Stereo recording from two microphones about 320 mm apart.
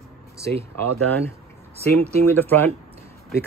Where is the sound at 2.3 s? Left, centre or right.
Centre.